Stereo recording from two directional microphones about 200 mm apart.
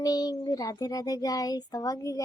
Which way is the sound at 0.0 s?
20° left (ahead or behind).